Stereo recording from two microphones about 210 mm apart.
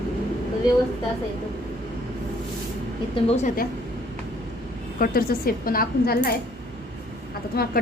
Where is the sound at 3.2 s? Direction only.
30° left (ahead or behind).